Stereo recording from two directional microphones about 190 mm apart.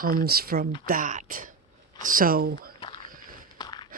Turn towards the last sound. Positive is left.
turn(degrees=20)  # may be behind; listen again after turning